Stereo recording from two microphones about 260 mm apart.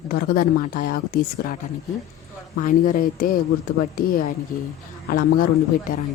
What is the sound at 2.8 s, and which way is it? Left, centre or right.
Speech, left.